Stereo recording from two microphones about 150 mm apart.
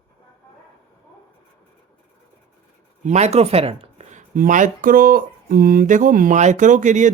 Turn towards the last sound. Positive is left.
turn(degrees=-55)  # may be behind; listen again after turning